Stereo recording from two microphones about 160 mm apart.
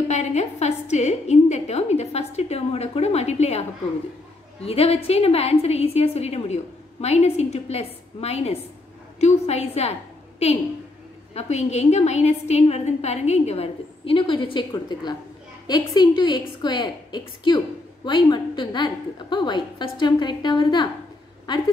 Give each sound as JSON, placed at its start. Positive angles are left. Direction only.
{"t": 0.1, "sound": "a woman's voice", "side_deg": 45}